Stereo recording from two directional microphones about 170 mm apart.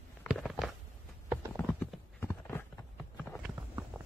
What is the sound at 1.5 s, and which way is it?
Clip-clop, 10° left (ahead or behind).